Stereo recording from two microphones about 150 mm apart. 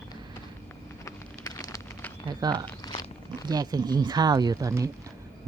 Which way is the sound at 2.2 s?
30° right (ahead or behind).